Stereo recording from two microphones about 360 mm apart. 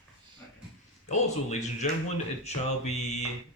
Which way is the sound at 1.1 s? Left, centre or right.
Centre.